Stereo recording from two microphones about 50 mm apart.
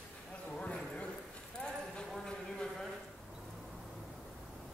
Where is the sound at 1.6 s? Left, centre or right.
Centre.